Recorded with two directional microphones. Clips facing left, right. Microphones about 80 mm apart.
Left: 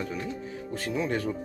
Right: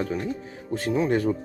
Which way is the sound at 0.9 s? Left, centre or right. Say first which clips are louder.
Right 7 dB; right.